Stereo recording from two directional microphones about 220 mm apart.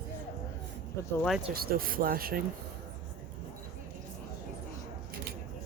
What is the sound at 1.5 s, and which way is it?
Speech, 40° right (ahead or behind).